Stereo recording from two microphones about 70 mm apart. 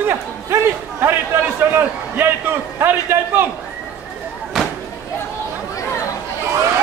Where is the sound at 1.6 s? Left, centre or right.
Right.